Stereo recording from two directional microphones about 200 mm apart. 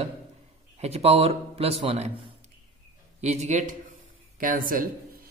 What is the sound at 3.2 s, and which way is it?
A man's voice, 35° right (ahead or behind).